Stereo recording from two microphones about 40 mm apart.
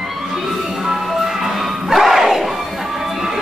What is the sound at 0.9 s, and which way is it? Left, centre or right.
Music, centre.